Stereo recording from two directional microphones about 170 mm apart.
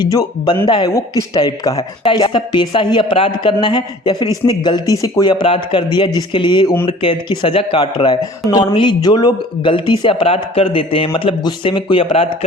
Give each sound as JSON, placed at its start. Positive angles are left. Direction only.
{"t": 0.0, "sound": "speech", "side_deg": 20}